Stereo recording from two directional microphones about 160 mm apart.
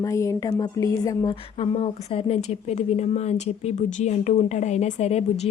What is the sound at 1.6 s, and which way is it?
A woman's voice, 35° left (ahead or behind).